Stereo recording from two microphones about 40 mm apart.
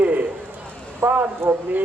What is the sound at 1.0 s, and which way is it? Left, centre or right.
Speech, right.